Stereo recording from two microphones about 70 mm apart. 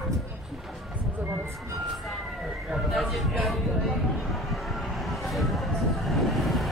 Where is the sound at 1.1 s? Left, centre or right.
Right.